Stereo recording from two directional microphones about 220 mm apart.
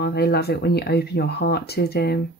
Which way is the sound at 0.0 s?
45° left (ahead or behind).